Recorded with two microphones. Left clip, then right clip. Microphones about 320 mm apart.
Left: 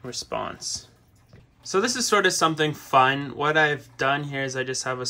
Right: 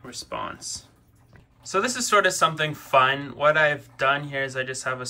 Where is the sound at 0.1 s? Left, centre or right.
Centre.